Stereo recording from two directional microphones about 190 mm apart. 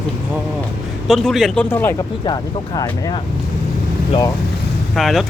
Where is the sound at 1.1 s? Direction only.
Centre (ahead or behind).